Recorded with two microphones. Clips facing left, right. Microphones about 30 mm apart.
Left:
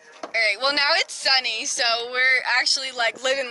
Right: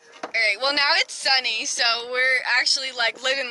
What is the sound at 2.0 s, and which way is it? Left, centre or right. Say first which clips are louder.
Speech: left 3 dB; centre.